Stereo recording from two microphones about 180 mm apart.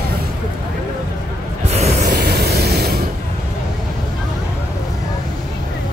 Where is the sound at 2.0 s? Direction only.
60° right (ahead or behind).